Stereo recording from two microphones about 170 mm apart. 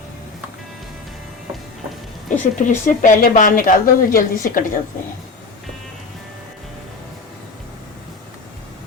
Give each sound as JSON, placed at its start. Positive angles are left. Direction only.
{"t": 2.3, "sound": "speech", "side_deg": 50}